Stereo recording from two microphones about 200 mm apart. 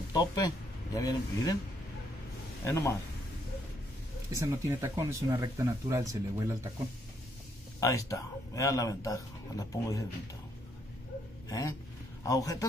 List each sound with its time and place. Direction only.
0.1 s speech: 20° left (ahead or behind)
2.6 s speech: 15° left (ahead or behind)
4.3 s speech: 15° right (ahead or behind)
7.8 s speech: 15° left (ahead or behind)
11.4 s a sound: 15° left (ahead or behind)
12.2 s a man's voice: 15° left (ahead or behind)